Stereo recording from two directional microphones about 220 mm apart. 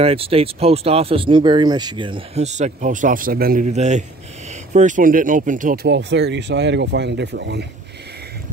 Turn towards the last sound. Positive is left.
turn(degrees=-50)  # may be behind; listen again after turning